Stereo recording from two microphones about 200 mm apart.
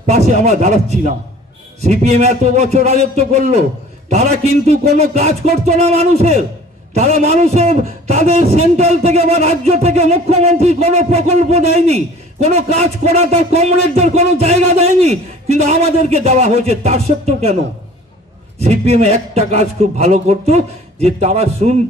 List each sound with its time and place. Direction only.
0.0 s a man's voice: 35° right (ahead or behind)
18.6 s a man's voice: 35° right (ahead or behind)